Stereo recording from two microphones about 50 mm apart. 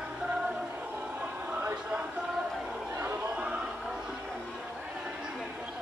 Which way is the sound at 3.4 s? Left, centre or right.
Right.